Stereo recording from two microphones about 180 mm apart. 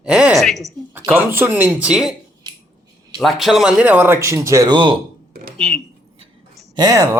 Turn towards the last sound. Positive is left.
turn(degrees=-20)  # may be behind; listen again after turning